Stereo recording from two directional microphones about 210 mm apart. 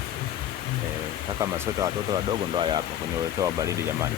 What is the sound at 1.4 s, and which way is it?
Speech, 15° right (ahead or behind).